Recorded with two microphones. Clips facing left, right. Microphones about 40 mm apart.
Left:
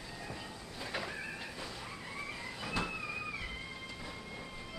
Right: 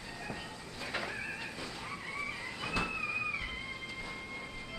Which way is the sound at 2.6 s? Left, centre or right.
Centre.